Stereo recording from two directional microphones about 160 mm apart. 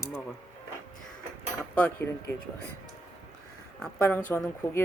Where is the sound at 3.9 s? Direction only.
15° left (ahead or behind).